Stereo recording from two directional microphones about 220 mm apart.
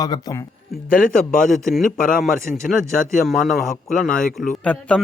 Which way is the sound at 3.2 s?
Centre (ahead or behind).